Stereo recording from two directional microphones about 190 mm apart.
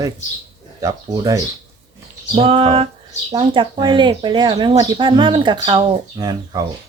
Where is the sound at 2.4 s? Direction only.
30° right (ahead or behind).